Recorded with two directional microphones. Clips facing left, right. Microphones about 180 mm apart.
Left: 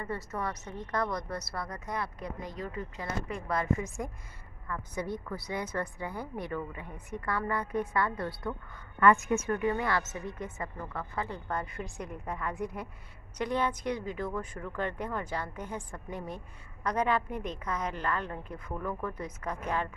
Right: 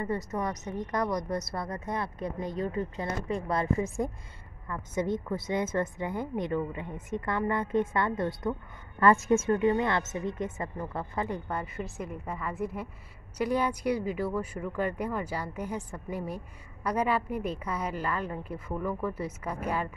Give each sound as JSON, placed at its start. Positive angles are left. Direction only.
{"t": 0.0, "sound": "a woman's voice", "side_deg": -20}